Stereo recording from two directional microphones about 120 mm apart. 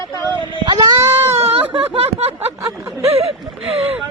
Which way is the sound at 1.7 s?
50° right (ahead or behind).